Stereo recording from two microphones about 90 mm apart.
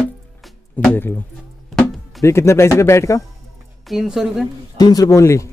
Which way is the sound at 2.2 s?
30° left (ahead or behind).